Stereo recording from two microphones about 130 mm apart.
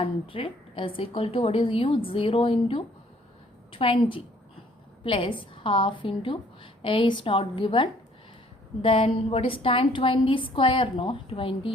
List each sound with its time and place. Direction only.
0.0 s a woman's voice: 45° left (ahead or behind)